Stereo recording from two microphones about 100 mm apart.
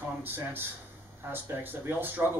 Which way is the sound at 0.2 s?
20° right (ahead or behind).